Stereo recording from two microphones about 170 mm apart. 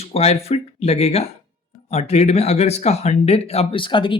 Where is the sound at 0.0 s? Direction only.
35° left (ahead or behind).